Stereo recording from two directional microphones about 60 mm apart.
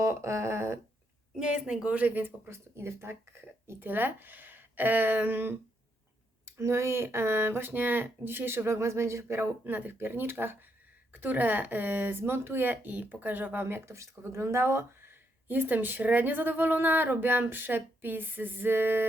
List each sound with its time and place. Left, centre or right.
0.0 s a sound: right
1.4 s speech: centre
2.0 s speech: right
2.5 s speech: right
3.8 s speech: right
6.4 s speech: right
9.6 s speech: right